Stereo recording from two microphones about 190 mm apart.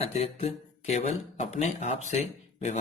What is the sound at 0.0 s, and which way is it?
Speech, 30° left (ahead or behind).